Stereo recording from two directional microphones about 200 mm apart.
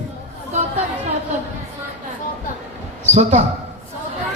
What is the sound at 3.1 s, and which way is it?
Speech, 35° right (ahead or behind).